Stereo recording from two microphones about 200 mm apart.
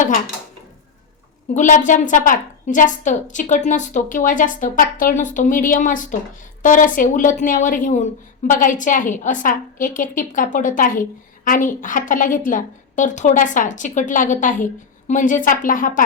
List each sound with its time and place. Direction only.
1.5 s a woman's voice: 40° left (ahead or behind)